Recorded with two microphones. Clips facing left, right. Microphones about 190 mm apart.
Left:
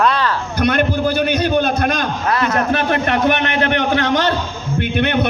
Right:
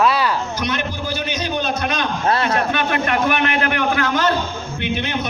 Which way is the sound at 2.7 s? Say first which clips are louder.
Left 3 dB; 35° left (ahead or behind).